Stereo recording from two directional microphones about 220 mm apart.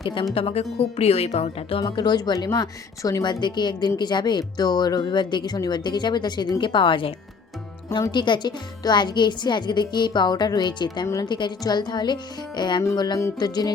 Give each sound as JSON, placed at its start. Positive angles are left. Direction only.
{"t": 0.3, "sound": "a woman's voice", "side_deg": 25}